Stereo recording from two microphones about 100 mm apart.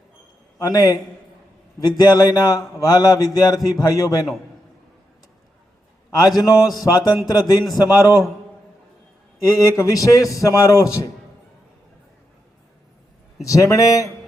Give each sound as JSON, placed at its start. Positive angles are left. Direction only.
{"t": 0.6, "sound": "a man's voice", "side_deg": 40}
{"t": 6.1, "sound": "a man's voice", "side_deg": 35}
{"t": 9.4, "sound": "a man's voice", "side_deg": 35}
{"t": 13.4, "sound": "a man's voice", "side_deg": 35}